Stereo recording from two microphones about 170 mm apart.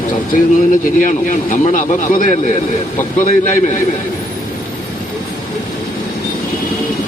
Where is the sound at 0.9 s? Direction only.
50° left (ahead or behind).